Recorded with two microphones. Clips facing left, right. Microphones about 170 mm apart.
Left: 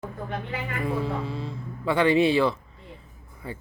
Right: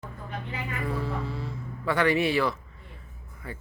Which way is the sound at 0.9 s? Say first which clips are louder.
Left 4 dB; 20° left (ahead or behind).